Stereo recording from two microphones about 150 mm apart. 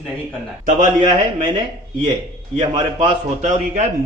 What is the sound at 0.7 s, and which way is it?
Speech, 55° right (ahead or behind).